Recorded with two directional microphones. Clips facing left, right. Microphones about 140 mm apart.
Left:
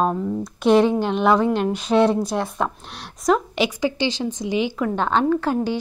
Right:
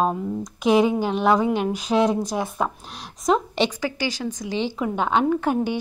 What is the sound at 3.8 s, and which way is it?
Speech, 25° left (ahead or behind).